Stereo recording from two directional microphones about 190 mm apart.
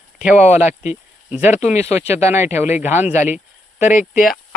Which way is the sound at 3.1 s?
35° left (ahead or behind).